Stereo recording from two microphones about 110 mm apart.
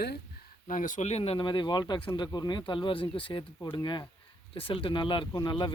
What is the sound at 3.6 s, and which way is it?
Speech, 40° left (ahead or behind).